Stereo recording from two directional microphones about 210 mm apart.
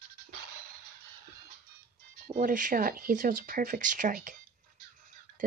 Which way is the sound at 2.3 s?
40° right (ahead or behind).